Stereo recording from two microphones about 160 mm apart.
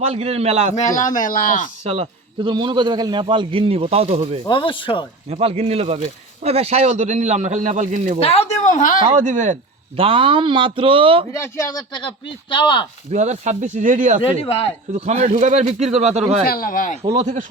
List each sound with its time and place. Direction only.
0.0 s a man's voice: 40° right (ahead or behind)
0.8 s speech: 50° left (ahead or behind)
1.8 s a man's voice: 40° right (ahead or behind)
4.4 s speech: 30° left (ahead or behind)
5.3 s a man's voice: 40° right (ahead or behind)
8.2 s a woman's voice: 40° left (ahead or behind); by 9.0 s 55° left (ahead or behind)
9.2 s a man's voice: 50° right (ahead or behind)
10.0 s a man's voice: 35° right (ahead or behind)
11.3 s speech: 15° left (ahead or behind)
11.9 s speech: 30° left (ahead or behind)
13.1 s a man's voice: 45° right (ahead or behind)
14.2 s speech: 35° left (ahead or behind)
14.9 s a man's voice: 45° right (ahead or behind)
16.5 s speech: 65° left (ahead or behind)